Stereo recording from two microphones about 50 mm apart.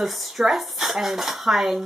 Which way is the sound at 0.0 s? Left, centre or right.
Centre.